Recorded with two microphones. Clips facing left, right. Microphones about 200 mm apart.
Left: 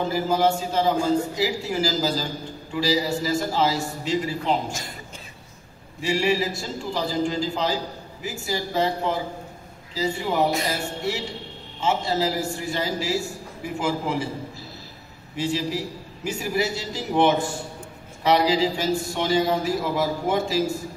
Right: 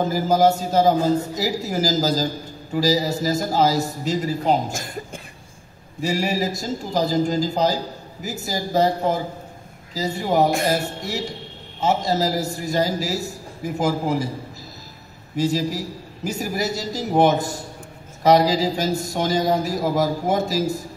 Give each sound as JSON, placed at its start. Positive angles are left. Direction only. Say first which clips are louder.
{"t": 0.0, "sound": "a man's voice", "louder": "right 4 dB", "side_deg": -40}
{"t": 15.3, "sound": "a man's voice", "louder": "right 4 dB", "side_deg": -40}